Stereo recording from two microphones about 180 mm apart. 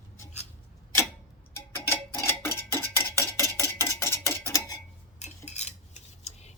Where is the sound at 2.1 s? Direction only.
15° left (ahead or behind).